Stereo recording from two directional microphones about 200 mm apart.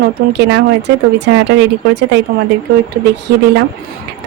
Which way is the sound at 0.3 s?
60° right (ahead or behind).